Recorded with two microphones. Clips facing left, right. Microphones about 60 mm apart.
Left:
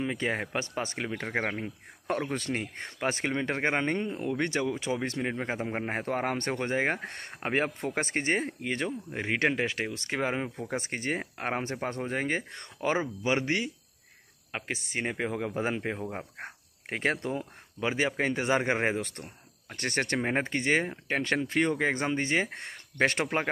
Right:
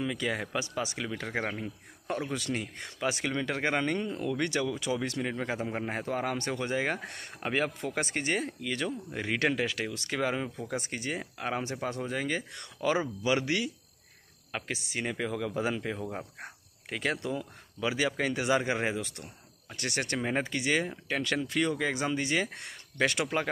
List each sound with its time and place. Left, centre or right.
0.0 s speech: left